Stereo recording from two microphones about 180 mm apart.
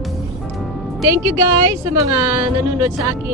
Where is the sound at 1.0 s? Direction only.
15° right (ahead or behind).